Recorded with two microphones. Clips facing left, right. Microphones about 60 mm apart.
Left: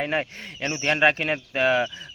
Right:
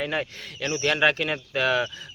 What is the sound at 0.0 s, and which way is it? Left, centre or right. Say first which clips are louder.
Speech: left 2 dB; left.